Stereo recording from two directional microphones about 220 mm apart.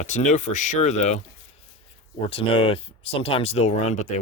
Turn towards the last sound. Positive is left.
turn(degrees=35)  # may be behind; listen again after turning